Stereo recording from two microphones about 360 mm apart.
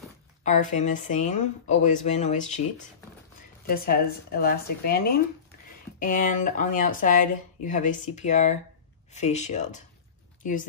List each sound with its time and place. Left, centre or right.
0.4 s speech: centre
3.6 s speech: left